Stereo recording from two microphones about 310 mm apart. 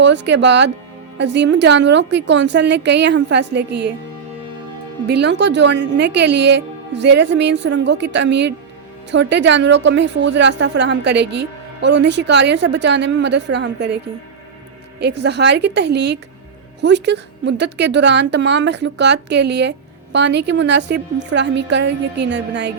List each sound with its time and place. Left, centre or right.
0.0 s a woman's voice: right
5.0 s a woman's voice: right
15.0 s a woman's voice: right